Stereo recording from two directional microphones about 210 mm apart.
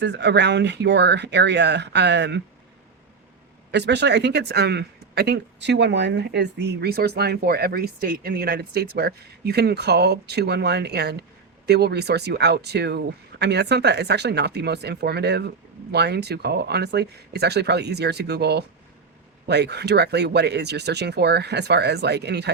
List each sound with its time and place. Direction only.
0.0 s speech: 55° right (ahead or behind)
3.7 s speech: 55° right (ahead or behind)